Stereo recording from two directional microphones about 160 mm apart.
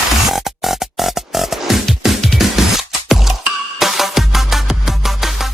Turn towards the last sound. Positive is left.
turn(degrees=0)  # may be behind; listen again after turning